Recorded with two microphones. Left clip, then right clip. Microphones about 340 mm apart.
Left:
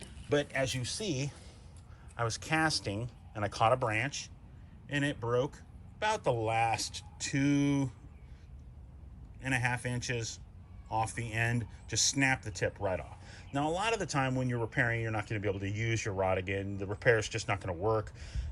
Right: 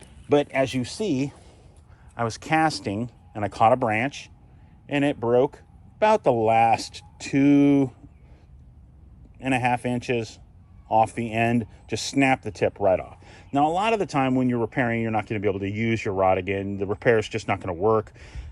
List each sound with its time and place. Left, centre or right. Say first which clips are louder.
0.3 s speech: right 10 dB; centre
9.4 s speech: right 10 dB; centre